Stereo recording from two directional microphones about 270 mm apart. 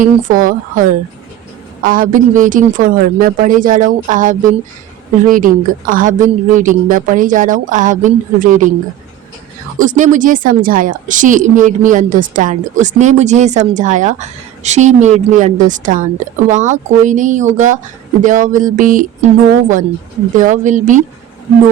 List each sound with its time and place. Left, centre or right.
0.0 s a woman's voice: right
9.7 s a woman's voice: right
20.3 s a woman's voice: right